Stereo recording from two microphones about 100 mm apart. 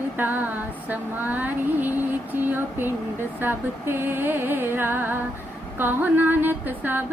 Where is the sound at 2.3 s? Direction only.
20° right (ahead or behind).